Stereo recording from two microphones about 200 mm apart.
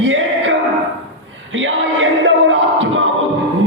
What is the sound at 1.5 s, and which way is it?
Music, 75° right (ahead or behind).